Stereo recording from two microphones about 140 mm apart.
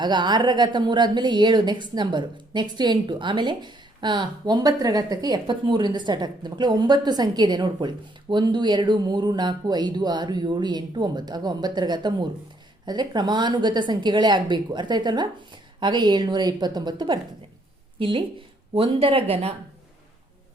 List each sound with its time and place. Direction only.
0.0 s a woman's voice: 30° right (ahead or behind)